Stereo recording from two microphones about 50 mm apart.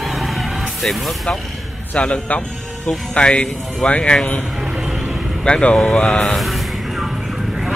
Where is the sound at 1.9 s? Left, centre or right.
Left.